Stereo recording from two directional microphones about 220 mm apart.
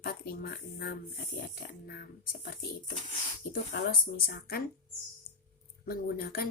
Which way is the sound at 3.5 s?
45° left (ahead or behind).